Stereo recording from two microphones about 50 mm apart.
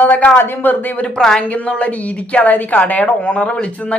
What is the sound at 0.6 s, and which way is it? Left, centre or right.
Speech, left.